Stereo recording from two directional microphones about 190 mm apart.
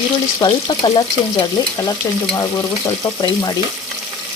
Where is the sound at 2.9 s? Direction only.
20° left (ahead or behind).